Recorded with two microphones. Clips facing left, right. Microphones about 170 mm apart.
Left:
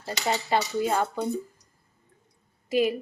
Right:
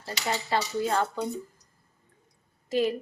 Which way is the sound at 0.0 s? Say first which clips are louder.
Left 3 dB; 15° left (ahead or behind).